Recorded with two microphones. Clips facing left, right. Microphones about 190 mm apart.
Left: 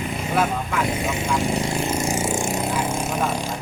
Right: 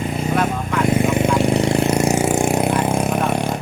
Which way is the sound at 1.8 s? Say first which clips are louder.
Right 7 dB; 70° right (ahead or behind).